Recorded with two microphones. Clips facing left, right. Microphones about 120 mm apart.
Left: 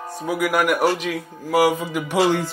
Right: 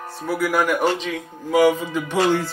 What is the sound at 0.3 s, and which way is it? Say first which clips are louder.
A man's voice: even; 10° left (ahead or behind).